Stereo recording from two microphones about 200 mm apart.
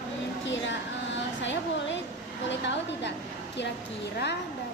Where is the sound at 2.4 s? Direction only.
60° left (ahead or behind).